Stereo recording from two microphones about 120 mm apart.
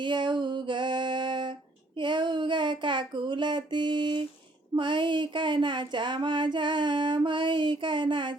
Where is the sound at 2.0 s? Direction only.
40° right (ahead or behind).